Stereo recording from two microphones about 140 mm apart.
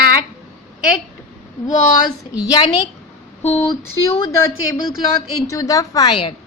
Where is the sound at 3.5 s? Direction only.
15° left (ahead or behind).